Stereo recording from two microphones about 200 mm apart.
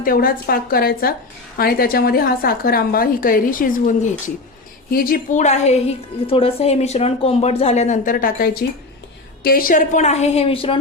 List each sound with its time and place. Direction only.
0.0 s a woman's voice: 45° left (ahead or behind); by 10.8 s 25° left (ahead or behind)